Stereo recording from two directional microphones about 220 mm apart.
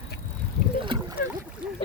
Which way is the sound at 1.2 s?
40° left (ahead or behind).